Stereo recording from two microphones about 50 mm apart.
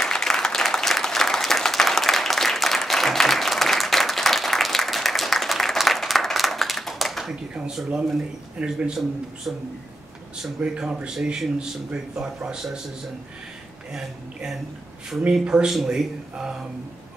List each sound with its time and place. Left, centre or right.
0.0 s applause: centre
7.5 s a man's voice: centre
10.6 s a man's voice: centre
13.9 s a man's voice: centre